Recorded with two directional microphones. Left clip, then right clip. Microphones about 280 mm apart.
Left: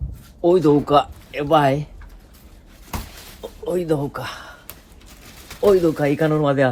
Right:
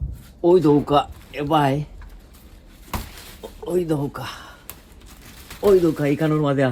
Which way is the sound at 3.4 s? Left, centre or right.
Centre.